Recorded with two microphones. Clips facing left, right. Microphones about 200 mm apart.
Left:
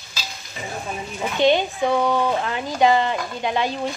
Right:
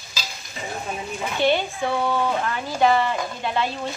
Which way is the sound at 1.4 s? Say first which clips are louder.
Left 4 dB; 20° left (ahead or behind).